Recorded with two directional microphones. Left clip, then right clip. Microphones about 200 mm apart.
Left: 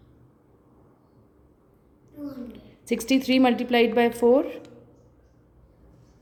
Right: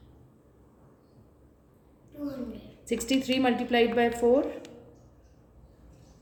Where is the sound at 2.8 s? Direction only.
45° left (ahead or behind).